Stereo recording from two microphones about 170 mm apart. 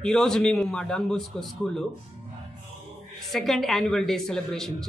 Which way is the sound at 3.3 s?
Centre (ahead or behind).